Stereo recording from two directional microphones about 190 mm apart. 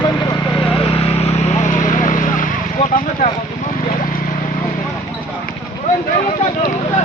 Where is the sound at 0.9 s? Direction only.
30° left (ahead or behind).